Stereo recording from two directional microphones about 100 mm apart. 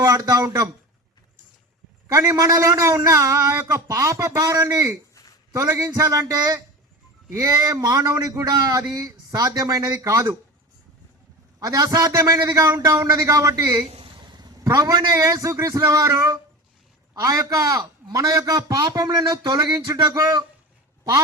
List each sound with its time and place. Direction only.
0.0 s speech: 35° right (ahead or behind)
2.1 s a man's voice: 35° right (ahead or behind)
11.6 s a man's voice: 35° right (ahead or behind)